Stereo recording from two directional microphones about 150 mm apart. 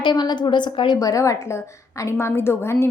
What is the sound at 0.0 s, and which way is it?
A woman's voice, 30° left (ahead or behind).